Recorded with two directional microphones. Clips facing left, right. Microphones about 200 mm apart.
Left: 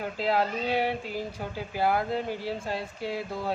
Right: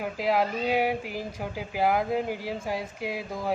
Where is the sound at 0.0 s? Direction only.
10° right (ahead or behind).